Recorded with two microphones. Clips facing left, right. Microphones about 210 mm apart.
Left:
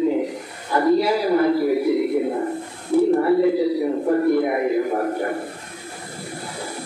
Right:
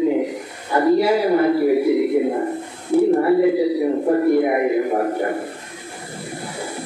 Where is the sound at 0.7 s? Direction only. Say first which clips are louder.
Right 2 dB; 25° right (ahead or behind).